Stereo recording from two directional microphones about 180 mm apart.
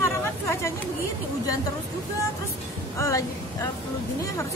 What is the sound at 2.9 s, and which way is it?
Speech, 15° left (ahead or behind).